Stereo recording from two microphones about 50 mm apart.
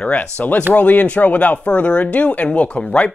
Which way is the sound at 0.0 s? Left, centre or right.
Left.